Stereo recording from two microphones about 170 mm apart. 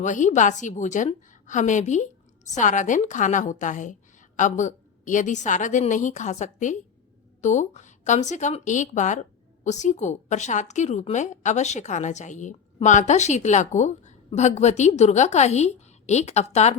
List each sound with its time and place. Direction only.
0.0 s a woman's voice: 45° left (ahead or behind)